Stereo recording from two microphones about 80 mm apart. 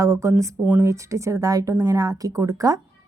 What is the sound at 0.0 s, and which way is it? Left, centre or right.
Speech, right.